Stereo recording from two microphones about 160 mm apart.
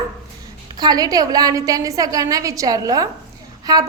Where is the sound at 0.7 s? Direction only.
25° right (ahead or behind).